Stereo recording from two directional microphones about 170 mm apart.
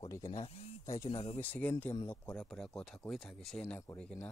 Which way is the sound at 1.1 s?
35° left (ahead or behind).